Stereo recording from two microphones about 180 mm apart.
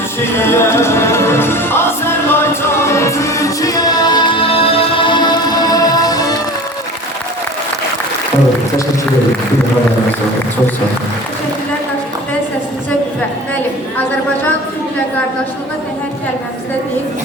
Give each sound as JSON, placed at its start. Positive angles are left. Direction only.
{"t": 0.3, "sound": "music", "side_deg": 15}